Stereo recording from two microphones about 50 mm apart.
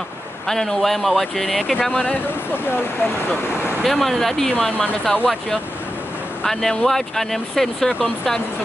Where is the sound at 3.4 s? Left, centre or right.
Left.